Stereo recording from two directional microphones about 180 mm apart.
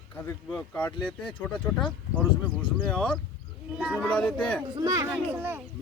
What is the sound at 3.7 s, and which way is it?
Speech, 10° right (ahead or behind).